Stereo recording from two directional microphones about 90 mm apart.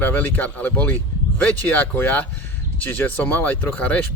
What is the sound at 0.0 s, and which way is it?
Speech, 20° left (ahead or behind).